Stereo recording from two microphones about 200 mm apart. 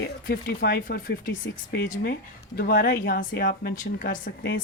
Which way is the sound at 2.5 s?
50° left (ahead or behind).